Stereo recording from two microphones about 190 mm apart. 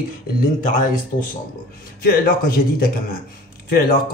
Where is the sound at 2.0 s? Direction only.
50° left (ahead or behind).